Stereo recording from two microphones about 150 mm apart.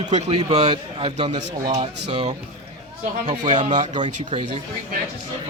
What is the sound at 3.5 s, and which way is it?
A man's voice, 50° right (ahead or behind).